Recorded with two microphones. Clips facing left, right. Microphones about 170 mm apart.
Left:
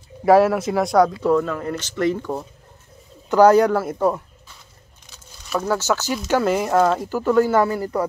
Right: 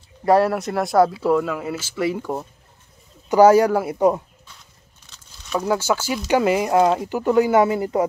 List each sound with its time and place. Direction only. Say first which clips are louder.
0.2 s speech: left 2 dB; centre (ahead or behind); by 4.2 s 15° right (ahead or behind)
5.6 s speech: right 1 dB; 15° right (ahead or behind)
7.1 s speech: even; 15° right (ahead or behind)